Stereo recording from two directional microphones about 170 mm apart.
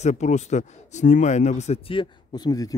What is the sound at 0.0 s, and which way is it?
Speech, 40° left (ahead or behind).